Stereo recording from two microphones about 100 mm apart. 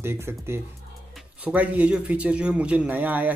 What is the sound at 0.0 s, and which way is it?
A man's voice, 25° right (ahead or behind).